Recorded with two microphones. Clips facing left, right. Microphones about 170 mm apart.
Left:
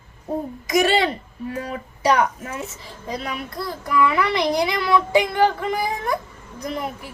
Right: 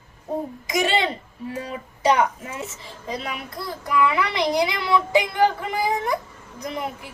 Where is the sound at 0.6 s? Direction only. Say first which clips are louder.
Left 4 dB; 20° right (ahead or behind).